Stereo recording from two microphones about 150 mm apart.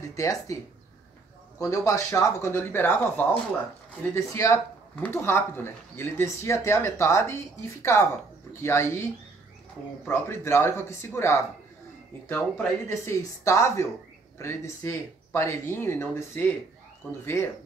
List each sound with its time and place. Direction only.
0.1 s speech: 20° left (ahead or behind)
1.6 s speech: 20° left (ahead or behind)